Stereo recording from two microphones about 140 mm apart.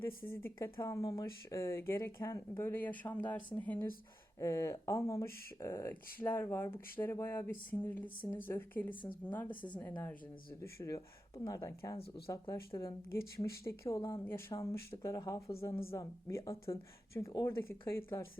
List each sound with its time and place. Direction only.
0.3 s speech: 15° left (ahead or behind)
10.6 s speech: 20° left (ahead or behind)
11.9 s speech: 40° left (ahead or behind)
12.7 s speech: 25° left (ahead or behind)